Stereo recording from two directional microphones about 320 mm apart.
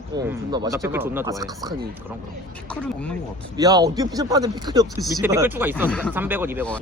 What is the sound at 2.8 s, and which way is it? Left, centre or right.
Speech, centre.